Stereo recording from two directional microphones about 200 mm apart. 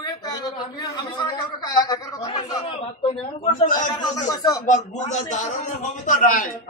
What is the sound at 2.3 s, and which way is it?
Speech, 30° left (ahead or behind).